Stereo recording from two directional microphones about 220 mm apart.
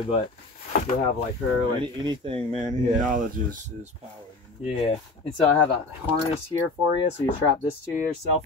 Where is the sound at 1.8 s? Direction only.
25° right (ahead or behind).